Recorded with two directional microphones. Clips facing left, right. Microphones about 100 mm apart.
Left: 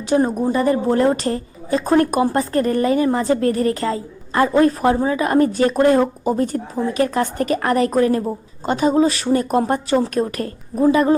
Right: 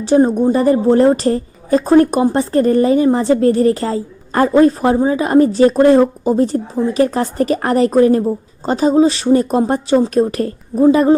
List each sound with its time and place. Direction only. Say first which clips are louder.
0.0 s a woman's voice: right 6 dB; 30° right (ahead or behind)